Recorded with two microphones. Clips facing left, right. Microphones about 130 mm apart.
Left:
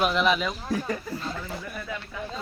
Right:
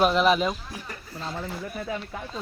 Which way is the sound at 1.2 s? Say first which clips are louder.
Even; 20° right (ahead or behind).